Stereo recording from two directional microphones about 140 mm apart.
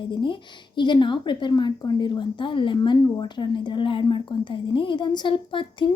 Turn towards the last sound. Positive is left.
turn(degrees=35)  # may be behind; listen again after turning